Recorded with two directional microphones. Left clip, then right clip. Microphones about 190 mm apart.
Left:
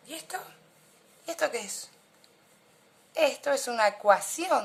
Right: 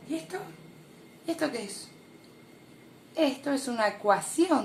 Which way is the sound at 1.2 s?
25° left (ahead or behind).